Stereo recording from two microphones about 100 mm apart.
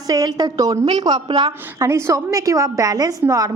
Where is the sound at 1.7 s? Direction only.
25° right (ahead or behind).